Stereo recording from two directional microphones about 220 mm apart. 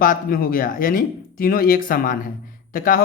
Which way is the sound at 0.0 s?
40° left (ahead or behind).